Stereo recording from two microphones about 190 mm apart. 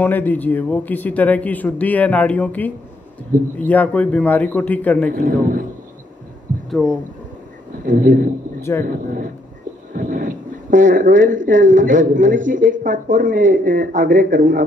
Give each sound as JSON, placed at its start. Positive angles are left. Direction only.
{"t": 0.0, "sound": "a man's voice", "side_deg": 10}
{"t": 5.1, "sound": "speech", "side_deg": -45}
{"t": 6.7, "sound": "speech", "side_deg": 5}
{"t": 7.8, "sound": "speech", "side_deg": -45}
{"t": 8.5, "sound": "speech", "side_deg": 15}
{"t": 8.9, "sound": "speech", "side_deg": -45}